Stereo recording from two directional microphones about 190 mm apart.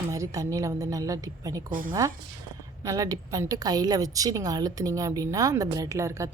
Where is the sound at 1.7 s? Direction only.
45° right (ahead or behind).